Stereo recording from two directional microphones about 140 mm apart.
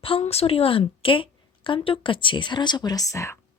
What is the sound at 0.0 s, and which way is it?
Speech, 45° left (ahead or behind).